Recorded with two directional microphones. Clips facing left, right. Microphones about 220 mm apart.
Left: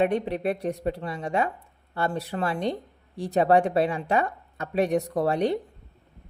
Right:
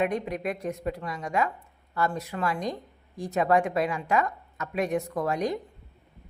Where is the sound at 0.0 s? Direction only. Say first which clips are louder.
Left 4 dB; 30° left (ahead or behind).